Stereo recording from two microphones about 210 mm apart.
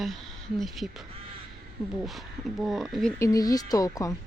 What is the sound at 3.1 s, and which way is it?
Speech, 15° left (ahead or behind).